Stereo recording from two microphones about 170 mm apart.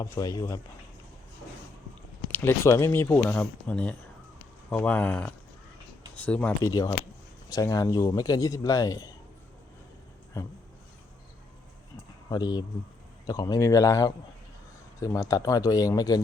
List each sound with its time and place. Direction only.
0.0 s speech: 20° left (ahead or behind)
2.3 s speech: 15° left (ahead or behind)
6.6 s speech: 20° left (ahead or behind)
12.3 s speech: 25° left (ahead or behind)